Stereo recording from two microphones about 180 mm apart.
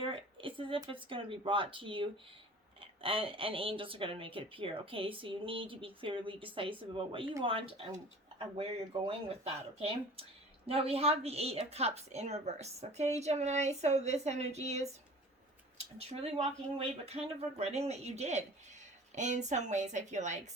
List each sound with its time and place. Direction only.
0.0 s speech: 30° right (ahead or behind)